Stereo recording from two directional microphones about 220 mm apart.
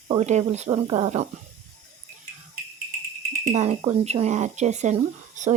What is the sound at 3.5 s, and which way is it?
Speech, 30° right (ahead or behind).